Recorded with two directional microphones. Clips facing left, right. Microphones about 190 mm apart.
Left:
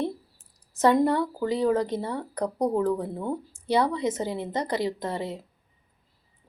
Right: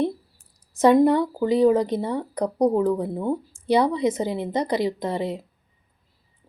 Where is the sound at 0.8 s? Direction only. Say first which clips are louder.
Right 5 dB; 15° right (ahead or behind).